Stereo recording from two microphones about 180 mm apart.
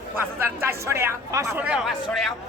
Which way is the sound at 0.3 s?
15° right (ahead or behind).